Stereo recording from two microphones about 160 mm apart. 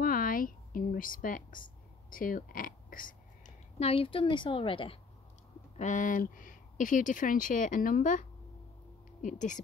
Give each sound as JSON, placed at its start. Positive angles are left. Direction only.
{"t": 0.0, "sound": "a sound", "side_deg": 65}
{"t": 2.0, "sound": "burping", "side_deg": 60}
{"t": 3.8, "sound": "a woman's voice", "side_deg": 35}
{"t": 5.8, "sound": "speech", "side_deg": 50}